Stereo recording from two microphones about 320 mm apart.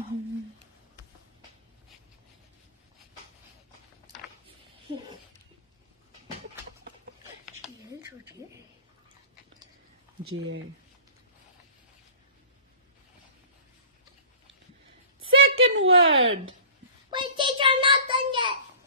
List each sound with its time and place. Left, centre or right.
10.2 s speech: right
15.1 s a sound: right
17.1 s child singing: centre